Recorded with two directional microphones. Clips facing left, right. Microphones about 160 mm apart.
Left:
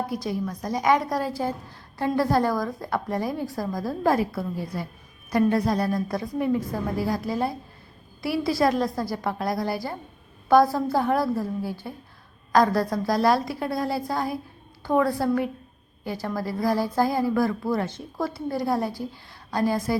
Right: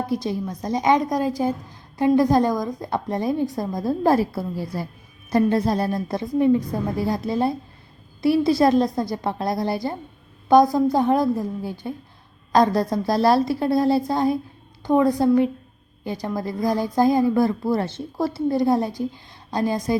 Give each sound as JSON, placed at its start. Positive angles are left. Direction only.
{"t": 0.1, "sound": "a woman's voice", "side_deg": -25}